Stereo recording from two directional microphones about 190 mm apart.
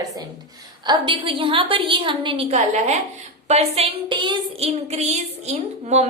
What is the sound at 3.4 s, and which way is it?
Child singing, 35° right (ahead or behind).